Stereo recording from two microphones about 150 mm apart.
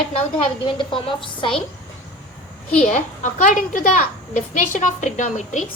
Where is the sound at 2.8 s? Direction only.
50° left (ahead or behind).